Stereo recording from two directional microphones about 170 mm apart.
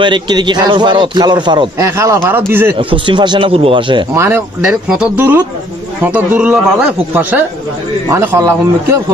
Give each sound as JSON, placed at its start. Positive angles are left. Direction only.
{"t": 0.0, "sound": "a man's voice", "side_deg": -25}
{"t": 1.9, "sound": "speech", "side_deg": -15}
{"t": 2.9, "sound": "a man's voice", "side_deg": -25}
{"t": 4.1, "sound": "speech", "side_deg": -15}
{"t": 4.6, "sound": "speech", "side_deg": -5}